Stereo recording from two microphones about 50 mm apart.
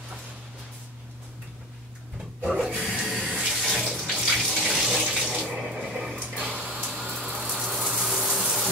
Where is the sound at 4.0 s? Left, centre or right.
Centre.